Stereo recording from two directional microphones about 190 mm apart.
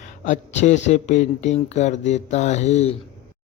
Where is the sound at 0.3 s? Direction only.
40° left (ahead or behind).